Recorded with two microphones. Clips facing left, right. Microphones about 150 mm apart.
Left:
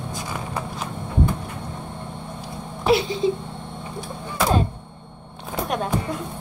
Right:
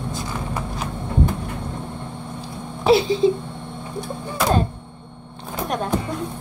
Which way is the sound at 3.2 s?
30° right (ahead or behind).